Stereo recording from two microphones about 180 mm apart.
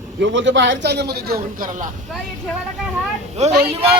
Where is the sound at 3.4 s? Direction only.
40° right (ahead or behind).